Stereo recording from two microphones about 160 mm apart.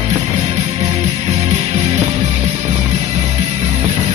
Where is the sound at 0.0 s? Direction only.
45° right (ahead or behind).